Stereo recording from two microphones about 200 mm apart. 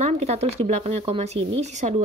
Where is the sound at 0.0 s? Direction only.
35° right (ahead or behind).